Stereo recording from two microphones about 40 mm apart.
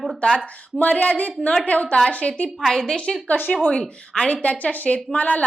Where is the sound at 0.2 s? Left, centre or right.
Left.